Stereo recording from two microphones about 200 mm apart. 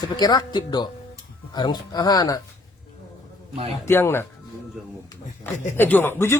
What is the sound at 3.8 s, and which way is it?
Speech, 10° left (ahead or behind).